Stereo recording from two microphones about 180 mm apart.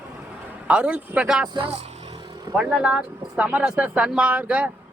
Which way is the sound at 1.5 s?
30° right (ahead or behind).